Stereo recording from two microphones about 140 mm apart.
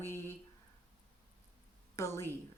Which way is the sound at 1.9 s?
20° left (ahead or behind).